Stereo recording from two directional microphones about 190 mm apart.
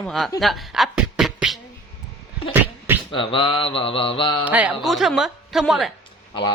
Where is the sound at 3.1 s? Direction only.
25° left (ahead or behind).